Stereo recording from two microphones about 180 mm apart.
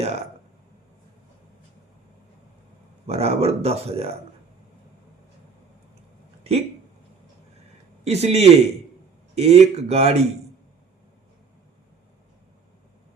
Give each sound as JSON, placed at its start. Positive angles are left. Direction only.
{"t": 0.0, "sound": "speech", "side_deg": -35}
{"t": 3.1, "sound": "speech", "side_deg": -35}
{"t": 6.4, "sound": "a sound", "side_deg": -35}
{"t": 8.0, "sound": "speech", "side_deg": -35}